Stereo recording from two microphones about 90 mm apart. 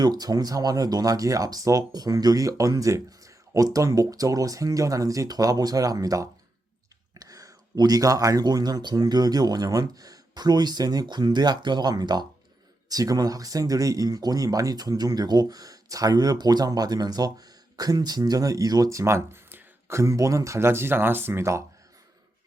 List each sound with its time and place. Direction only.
0.0 s speech: 50° right (ahead or behind); by 21.6 s 30° right (ahead or behind)